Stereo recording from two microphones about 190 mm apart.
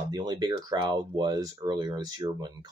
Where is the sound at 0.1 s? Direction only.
20° right (ahead or behind).